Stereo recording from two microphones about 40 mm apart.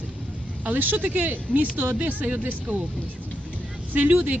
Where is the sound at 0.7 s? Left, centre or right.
Right.